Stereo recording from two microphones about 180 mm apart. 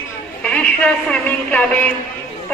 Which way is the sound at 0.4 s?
5° left (ahead or behind).